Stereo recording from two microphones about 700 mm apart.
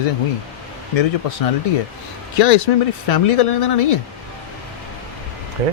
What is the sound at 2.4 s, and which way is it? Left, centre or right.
Speech, left.